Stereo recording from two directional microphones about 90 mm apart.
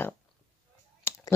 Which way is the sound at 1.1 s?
25° left (ahead or behind).